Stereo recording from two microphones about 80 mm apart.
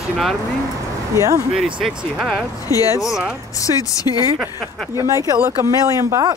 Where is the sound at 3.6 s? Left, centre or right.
Left.